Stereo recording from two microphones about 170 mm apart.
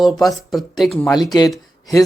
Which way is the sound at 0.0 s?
Centre (ahead or behind).